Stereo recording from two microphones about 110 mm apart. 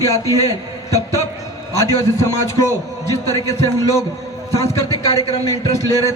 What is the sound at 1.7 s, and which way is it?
A man's voice, 25° left (ahead or behind).